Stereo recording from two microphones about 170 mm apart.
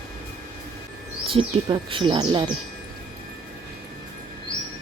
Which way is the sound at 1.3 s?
30° right (ahead or behind).